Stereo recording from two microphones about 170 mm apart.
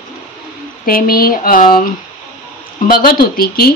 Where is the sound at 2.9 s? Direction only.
60° left (ahead or behind).